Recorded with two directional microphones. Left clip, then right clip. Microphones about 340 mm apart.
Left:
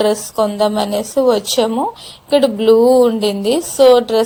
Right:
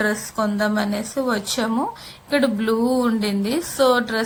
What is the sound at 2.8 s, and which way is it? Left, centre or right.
Speech, centre.